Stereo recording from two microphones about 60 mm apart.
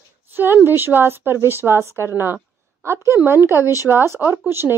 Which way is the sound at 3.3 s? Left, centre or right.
Right.